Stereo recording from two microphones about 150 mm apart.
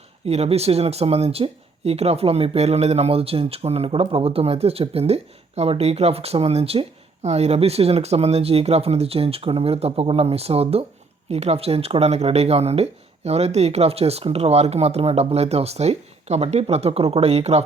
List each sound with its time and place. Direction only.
0.3 s speech: 45° right (ahead or behind)